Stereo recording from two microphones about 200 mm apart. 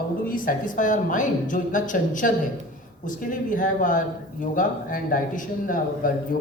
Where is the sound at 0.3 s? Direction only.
45° left (ahead or behind).